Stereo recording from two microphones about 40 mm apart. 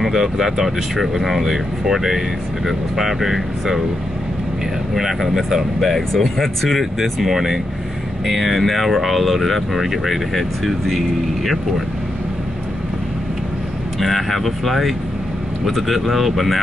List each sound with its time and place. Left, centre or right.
0.0 s speech: centre
4.9 s speech: centre
13.9 s speech: centre